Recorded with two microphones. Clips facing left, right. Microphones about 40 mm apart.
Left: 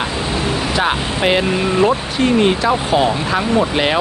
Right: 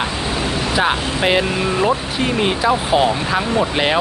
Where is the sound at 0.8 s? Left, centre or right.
Centre.